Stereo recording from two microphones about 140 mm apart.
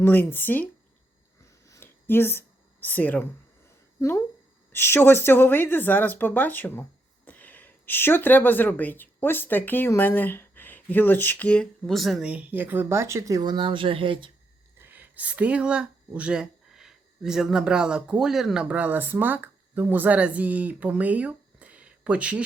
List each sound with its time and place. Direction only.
0.0 s a woman's voice: 15° left (ahead or behind)
1.4 s a sound: 25° left (ahead or behind)
2.8 s a woman's voice: 10° left (ahead or behind)
4.7 s a woman's voice: 15° left (ahead or behind); by 14.3 s 35° right (ahead or behind)
14.8 s speech: 15° right (ahead or behind)